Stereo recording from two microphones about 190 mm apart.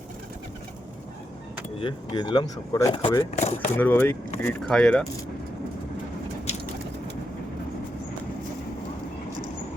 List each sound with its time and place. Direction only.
1.8 s speech: 25° left (ahead or behind)
3.3 s speech: 40° left (ahead or behind)
3.8 s speech: 10° left (ahead or behind)